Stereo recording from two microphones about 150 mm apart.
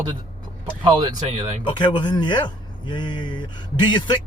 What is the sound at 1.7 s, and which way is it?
A man's voice, 30° left (ahead or behind).